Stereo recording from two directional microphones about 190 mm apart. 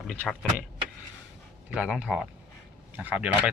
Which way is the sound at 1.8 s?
5° right (ahead or behind).